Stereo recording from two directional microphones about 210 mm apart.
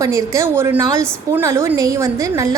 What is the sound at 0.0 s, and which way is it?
A woman's voice, 15° right (ahead or behind).